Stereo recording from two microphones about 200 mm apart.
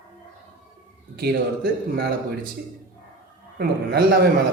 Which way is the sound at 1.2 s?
55° right (ahead or behind).